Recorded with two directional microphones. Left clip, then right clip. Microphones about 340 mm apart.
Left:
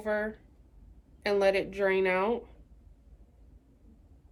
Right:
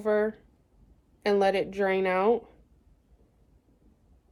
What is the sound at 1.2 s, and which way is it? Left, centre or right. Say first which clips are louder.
Speech: right 2 dB; right.